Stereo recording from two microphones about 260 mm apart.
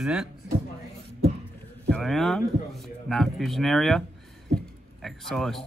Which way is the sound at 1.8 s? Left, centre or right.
Centre.